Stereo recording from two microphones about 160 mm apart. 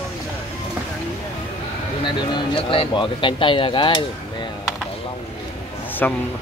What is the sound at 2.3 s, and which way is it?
Speech, 30° left (ahead or behind).